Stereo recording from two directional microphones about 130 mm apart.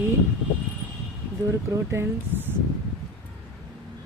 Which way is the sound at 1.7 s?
20° right (ahead or behind).